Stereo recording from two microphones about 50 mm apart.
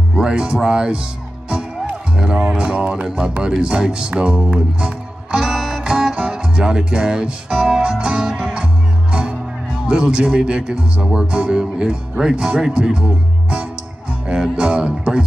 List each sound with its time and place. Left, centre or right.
0.2 s speech: centre
2.1 s speech: centre
9.1 s music: centre
9.8 s speech: centre